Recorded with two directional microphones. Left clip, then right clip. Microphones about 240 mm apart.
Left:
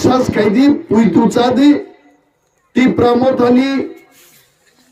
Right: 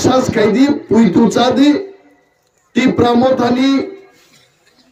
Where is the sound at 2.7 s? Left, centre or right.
Centre.